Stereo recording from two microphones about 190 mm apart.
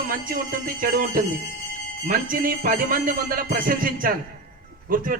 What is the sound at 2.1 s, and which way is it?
Music, 50° right (ahead or behind).